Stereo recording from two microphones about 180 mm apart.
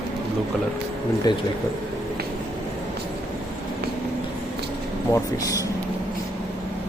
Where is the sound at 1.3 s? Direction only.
25° left (ahead or behind).